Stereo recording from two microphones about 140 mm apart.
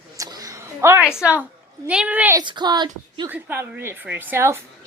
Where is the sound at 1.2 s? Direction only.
10° right (ahead or behind).